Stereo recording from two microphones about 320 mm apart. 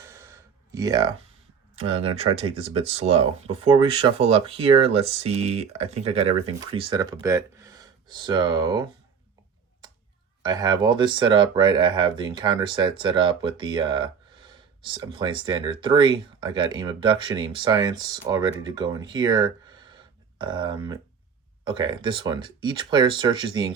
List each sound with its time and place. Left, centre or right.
0.0 s a sound: centre
0.7 s speech: centre
10.4 s speech: centre